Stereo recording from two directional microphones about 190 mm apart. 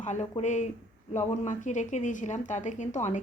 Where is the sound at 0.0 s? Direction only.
35° left (ahead or behind).